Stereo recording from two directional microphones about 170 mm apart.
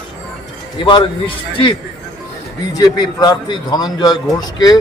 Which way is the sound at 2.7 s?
20° left (ahead or behind).